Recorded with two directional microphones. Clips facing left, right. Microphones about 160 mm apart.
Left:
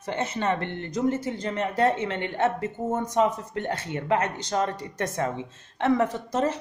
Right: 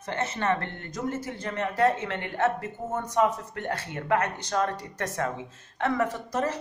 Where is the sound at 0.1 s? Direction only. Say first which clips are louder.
Left 1 dB; 20° left (ahead or behind).